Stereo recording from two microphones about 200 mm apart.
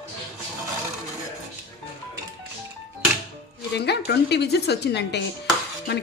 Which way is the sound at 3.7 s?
55° left (ahead or behind).